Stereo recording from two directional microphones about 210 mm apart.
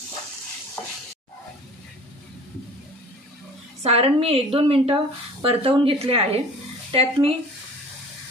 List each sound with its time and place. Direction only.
3.8 s a woman's voice: 30° right (ahead or behind)